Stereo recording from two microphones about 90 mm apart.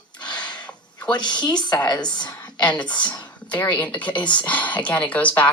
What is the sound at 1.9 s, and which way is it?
Speech, 50° left (ahead or behind).